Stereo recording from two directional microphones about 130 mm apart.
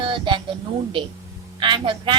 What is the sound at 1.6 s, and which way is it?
Speech, 40° right (ahead or behind).